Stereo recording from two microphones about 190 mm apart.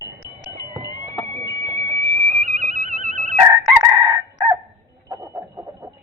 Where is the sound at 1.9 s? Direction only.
65° left (ahead or behind).